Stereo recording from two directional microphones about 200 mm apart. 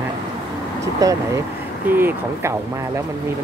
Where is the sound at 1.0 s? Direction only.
15° right (ahead or behind).